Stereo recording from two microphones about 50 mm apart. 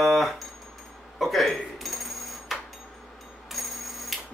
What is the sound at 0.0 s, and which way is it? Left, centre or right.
Music, centre.